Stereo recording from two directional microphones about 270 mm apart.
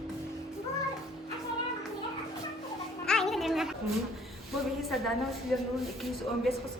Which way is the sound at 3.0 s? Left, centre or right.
Centre.